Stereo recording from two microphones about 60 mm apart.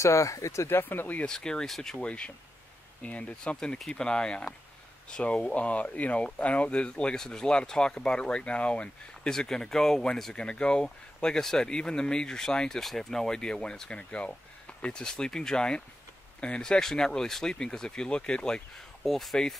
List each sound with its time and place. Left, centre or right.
0.0 s speech: left
0.7 s speech: left
1.2 s speech: centre